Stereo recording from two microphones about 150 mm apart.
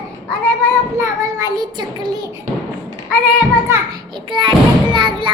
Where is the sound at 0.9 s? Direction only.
25° right (ahead or behind).